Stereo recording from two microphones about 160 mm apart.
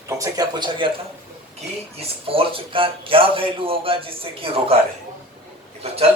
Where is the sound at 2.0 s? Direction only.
35° right (ahead or behind).